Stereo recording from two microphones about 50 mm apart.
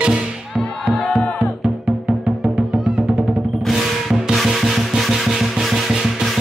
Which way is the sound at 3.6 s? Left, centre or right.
Centre.